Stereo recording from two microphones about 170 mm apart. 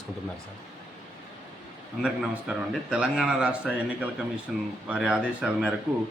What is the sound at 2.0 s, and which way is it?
A man's voice, 5° right (ahead or behind).